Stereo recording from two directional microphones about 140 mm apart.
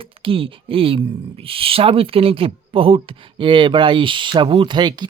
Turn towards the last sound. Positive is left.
turn(degrees=-30)  # may be behind; listen again after turning